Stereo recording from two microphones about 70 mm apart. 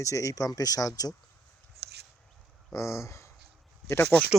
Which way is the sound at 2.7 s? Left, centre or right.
Left.